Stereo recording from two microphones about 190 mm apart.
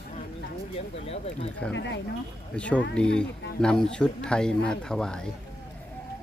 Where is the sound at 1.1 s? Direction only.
35° left (ahead or behind).